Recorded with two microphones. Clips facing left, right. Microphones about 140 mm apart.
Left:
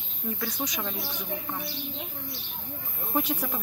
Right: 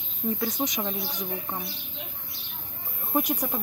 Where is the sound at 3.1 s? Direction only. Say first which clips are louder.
Right 2 dB; 15° right (ahead or behind).